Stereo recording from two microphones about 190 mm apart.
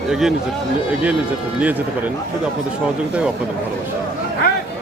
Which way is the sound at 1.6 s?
10° right (ahead or behind).